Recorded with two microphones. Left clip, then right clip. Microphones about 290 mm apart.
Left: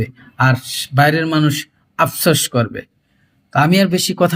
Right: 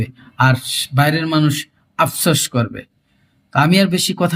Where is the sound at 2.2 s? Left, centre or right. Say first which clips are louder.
Left 2 dB; centre.